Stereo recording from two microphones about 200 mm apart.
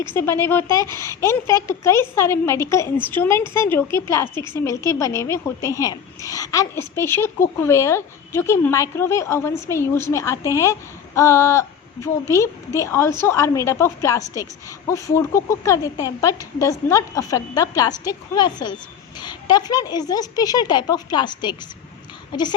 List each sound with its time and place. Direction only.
0.0 s a woman's voice: 10° left (ahead or behind)